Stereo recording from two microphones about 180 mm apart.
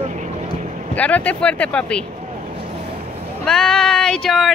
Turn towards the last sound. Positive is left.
turn(degrees=0)  # may be behind; listen again after turning